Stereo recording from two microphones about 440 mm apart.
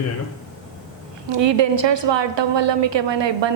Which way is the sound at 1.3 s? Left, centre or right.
Right.